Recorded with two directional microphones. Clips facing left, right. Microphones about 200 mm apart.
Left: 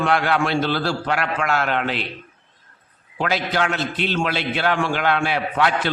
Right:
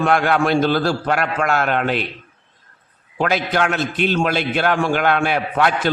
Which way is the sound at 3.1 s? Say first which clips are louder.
Right 3 dB; 50° right (ahead or behind).